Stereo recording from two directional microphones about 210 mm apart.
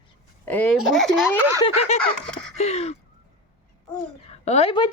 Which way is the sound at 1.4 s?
10° right (ahead or behind).